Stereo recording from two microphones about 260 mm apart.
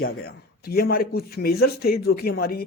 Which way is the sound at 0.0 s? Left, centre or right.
Left.